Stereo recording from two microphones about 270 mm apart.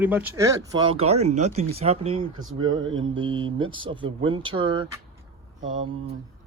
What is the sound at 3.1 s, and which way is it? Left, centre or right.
Speech, centre.